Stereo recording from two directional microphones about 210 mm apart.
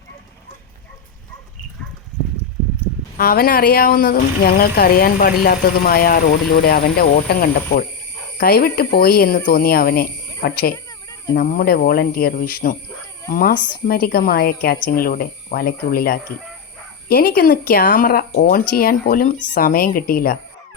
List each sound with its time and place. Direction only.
3.2 s speech: 45° left (ahead or behind)